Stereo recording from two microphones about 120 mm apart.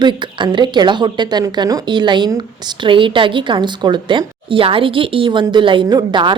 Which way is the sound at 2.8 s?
45° right (ahead or behind).